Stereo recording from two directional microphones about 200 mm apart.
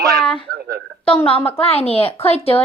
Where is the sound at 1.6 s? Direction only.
30° left (ahead or behind).